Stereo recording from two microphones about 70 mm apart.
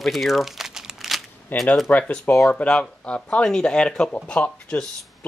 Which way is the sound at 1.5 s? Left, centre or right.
Left.